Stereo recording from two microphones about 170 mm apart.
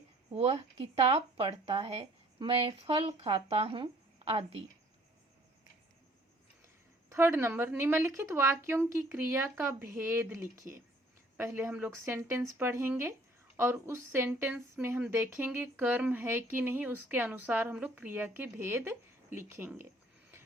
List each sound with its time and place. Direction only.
0.3 s speech: 35° right (ahead or behind)
7.1 s speech: 15° right (ahead or behind)